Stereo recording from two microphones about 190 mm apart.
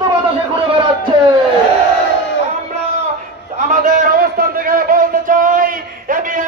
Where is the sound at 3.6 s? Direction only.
40° right (ahead or behind).